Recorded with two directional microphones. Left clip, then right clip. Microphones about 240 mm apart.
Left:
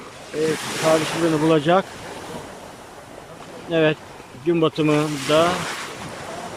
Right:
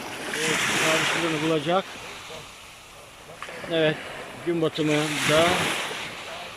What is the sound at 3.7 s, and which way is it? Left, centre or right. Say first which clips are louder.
Speech: left 4 dB; centre.